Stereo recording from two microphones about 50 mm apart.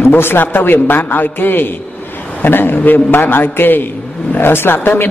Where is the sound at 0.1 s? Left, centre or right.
Left.